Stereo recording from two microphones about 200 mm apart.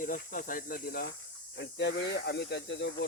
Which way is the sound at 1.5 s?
60° left (ahead or behind).